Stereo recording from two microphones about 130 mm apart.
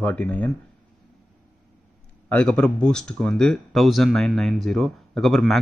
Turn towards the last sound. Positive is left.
turn(degrees=0)  # may be behind; listen again after turning